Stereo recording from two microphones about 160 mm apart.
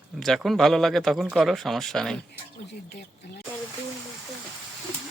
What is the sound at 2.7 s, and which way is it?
Speech, 90° left.